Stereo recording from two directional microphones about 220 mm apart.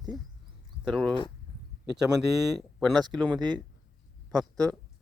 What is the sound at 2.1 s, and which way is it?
Speech, centre (ahead or behind).